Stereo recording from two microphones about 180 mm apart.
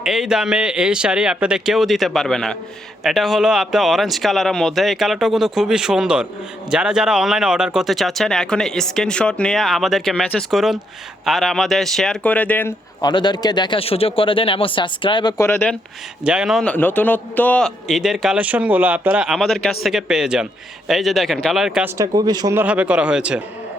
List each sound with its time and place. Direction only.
0.0 s speech: 5° right (ahead or behind)
13.0 s a man's voice: 25° left (ahead or behind)
16.2 s speech: 5° right (ahead or behind)
21.9 s speech: 20° right (ahead or behind)
22.6 s speech: 5° right (ahead or behind)